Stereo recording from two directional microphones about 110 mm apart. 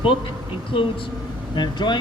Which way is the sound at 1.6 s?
45° left (ahead or behind).